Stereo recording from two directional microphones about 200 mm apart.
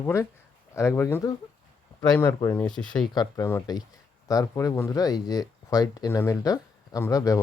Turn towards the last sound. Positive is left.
turn(degrees=15)  # may be behind; listen again after turning